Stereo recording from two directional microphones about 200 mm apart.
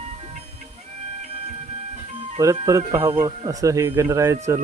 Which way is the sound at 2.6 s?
15° right (ahead or behind).